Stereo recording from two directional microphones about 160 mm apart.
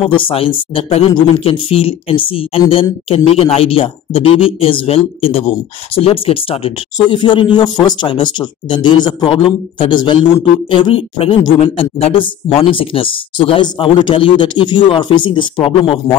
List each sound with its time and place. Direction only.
0.0 s speech: 35° left (ahead or behind)